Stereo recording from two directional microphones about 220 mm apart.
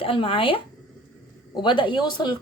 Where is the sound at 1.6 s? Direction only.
20° left (ahead or behind).